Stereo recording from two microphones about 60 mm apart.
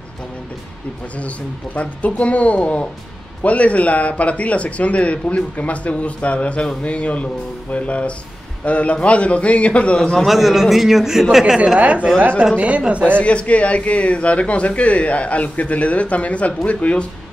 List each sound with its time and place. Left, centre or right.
1.8 s speech: left
10.2 s a man's voice: centre; by 13.0 s right
13.2 s speech: centre